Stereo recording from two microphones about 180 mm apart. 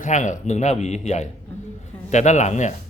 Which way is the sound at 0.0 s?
45° left (ahead or behind).